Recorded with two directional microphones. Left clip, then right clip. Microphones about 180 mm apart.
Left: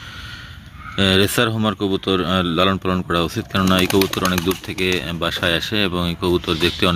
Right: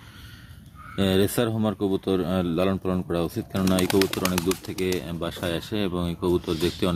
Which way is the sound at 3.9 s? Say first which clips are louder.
Left 5 dB; 30° left (ahead or behind).